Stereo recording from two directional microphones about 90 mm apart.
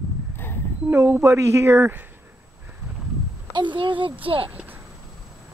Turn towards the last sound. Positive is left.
turn(degrees=-20)  # may be behind; listen again after turning